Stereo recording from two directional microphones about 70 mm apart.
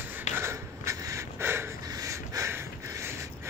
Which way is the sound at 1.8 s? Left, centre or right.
Right.